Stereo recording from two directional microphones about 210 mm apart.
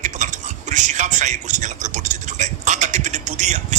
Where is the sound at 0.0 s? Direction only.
35° right (ahead or behind).